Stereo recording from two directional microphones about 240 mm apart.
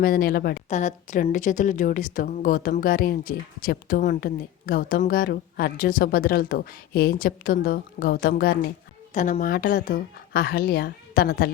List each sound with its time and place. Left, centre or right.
0.0 s speech: left